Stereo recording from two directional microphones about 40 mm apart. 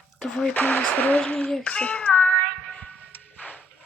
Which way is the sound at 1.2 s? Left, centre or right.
Left.